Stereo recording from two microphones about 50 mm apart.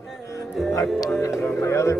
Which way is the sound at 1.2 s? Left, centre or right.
Left.